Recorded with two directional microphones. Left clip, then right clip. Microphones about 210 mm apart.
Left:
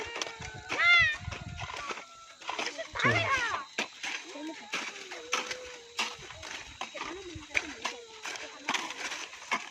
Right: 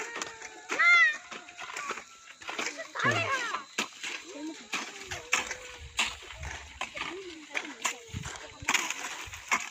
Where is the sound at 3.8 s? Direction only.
55° right (ahead or behind).